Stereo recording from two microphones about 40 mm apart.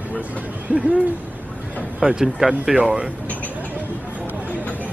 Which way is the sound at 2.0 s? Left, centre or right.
Centre.